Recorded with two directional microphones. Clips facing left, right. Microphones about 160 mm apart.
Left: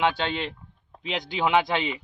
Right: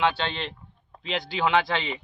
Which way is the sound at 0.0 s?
15° left (ahead or behind).